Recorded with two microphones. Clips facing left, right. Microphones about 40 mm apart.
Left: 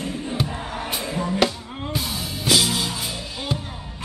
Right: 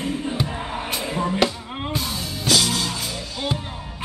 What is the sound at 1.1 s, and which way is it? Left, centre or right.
Chop, centre.